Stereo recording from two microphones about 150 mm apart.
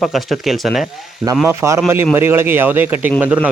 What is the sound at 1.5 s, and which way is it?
A man's voice, 20° right (ahead or behind).